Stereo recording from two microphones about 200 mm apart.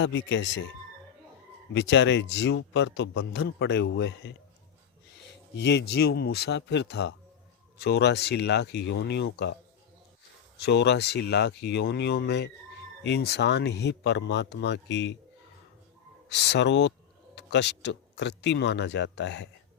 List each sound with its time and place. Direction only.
0.0 s speech: 70° left (ahead or behind)
1.7 s a man's voice: 65° left (ahead or behind)
5.5 s a man's voice: 60° left (ahead or behind)
10.6 s a man's voice: 60° left (ahead or behind)
16.3 s a man's voice: 60° left (ahead or behind)